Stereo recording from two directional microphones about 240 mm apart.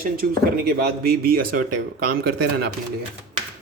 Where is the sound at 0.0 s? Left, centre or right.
Right.